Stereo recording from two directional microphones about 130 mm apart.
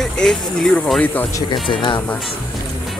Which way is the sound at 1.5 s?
35° left (ahead or behind).